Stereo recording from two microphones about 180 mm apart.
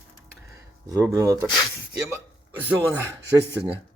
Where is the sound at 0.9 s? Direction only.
15° right (ahead or behind).